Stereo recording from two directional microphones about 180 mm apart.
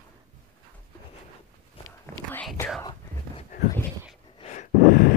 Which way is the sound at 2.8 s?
20° left (ahead or behind).